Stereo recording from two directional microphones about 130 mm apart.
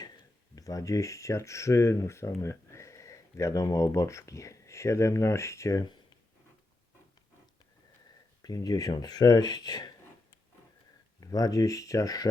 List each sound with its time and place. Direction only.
0.5 s speech: 25° left (ahead or behind)
8.4 s speech: 30° left (ahead or behind)
11.2 s speech: 30° left (ahead or behind)